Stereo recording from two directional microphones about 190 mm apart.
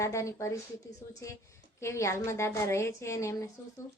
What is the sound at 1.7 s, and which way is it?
Speech, 15° left (ahead or behind).